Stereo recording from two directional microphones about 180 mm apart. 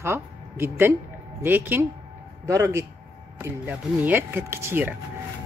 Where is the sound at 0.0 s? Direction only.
15° right (ahead or behind).